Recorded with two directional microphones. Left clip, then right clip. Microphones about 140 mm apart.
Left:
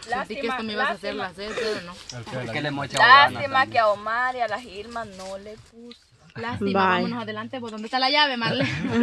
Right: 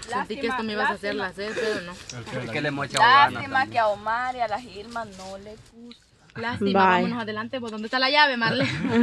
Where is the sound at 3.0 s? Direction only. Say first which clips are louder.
Left 2 dB; 40° left (ahead or behind).